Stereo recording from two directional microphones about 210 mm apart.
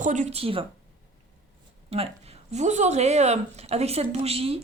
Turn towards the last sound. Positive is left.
turn(degrees=-30)  # may be behind; listen again after turning